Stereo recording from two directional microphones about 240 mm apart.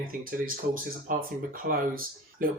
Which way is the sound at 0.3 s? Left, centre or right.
Right.